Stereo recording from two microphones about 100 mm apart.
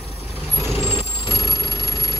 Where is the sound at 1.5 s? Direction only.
35° left (ahead or behind).